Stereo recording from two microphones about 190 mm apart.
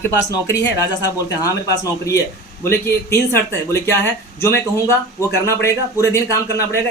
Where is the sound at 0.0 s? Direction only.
15° left (ahead or behind).